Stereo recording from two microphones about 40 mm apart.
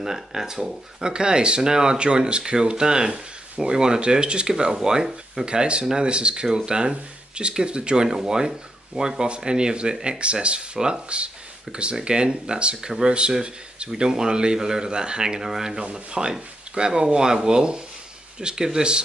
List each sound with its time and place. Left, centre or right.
0.0 s speech: centre
15.8 s speech: right